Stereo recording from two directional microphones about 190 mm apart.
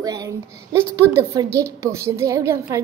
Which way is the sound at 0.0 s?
20° right (ahead or behind).